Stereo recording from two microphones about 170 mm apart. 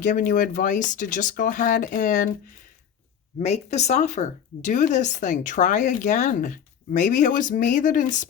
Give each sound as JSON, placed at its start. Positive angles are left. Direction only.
{"t": 0.0, "sound": "speech", "side_deg": 50}
{"t": 3.4, "sound": "speech", "side_deg": 40}